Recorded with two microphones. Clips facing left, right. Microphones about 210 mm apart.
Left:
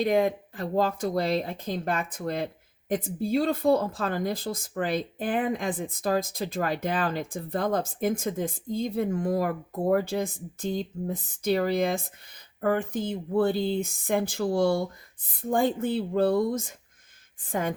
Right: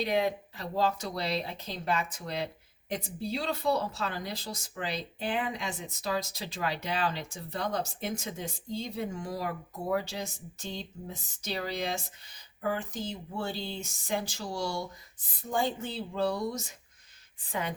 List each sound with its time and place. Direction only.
0.0 s speech: 50° left (ahead or behind)